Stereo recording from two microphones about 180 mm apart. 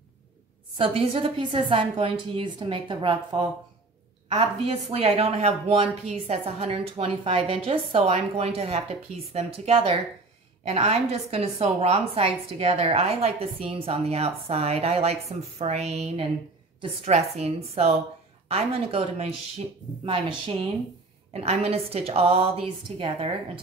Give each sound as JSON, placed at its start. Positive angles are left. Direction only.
{"t": 0.7, "sound": "a woman's voice", "side_deg": -30}